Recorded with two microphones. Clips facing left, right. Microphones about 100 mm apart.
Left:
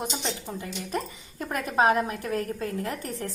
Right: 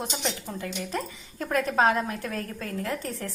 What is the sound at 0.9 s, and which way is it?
A woman's voice, 25° left (ahead or behind).